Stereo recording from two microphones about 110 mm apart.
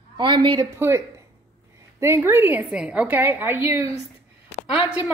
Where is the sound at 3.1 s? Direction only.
20° right (ahead or behind).